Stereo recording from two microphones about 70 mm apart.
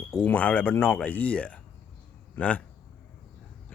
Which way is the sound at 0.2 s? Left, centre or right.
Centre.